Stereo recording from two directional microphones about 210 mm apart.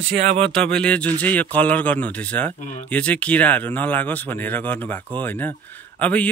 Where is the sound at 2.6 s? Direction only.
35° left (ahead or behind).